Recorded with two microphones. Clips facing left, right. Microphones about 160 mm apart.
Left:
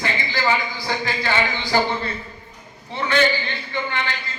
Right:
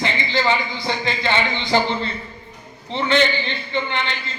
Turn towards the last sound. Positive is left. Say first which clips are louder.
# right 2 dB
turn(degrees=-20)  # may be behind; listen again after turning